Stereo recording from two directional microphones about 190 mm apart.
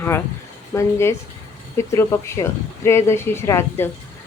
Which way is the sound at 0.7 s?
15° left (ahead or behind).